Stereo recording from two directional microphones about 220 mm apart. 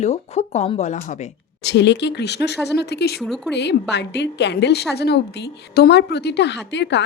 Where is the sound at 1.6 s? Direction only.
50° left (ahead or behind).